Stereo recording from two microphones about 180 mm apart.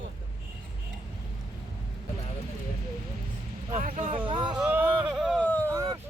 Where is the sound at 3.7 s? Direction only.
45° right (ahead or behind).